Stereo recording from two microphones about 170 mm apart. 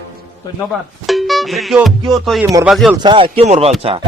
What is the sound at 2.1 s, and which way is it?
Speech, centre (ahead or behind).